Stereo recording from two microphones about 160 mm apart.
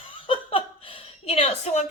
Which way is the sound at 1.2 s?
40° left (ahead or behind).